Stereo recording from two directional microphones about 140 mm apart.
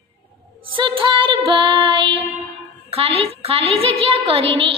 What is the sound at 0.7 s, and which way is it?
A woman's voice, 40° right (ahead or behind).